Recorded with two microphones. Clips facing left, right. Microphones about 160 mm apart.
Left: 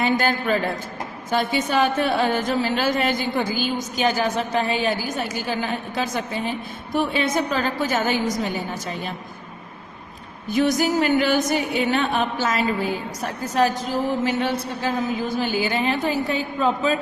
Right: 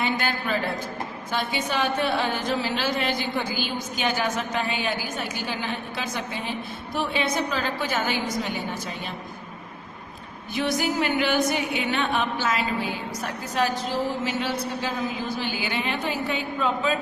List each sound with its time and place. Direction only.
0.0 s a woman's voice: 40° left (ahead or behind)
10.5 s a woman's voice: 40° left (ahead or behind)